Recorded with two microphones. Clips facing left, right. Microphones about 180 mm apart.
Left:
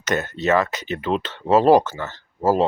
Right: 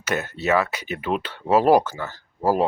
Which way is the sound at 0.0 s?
10° right (ahead or behind).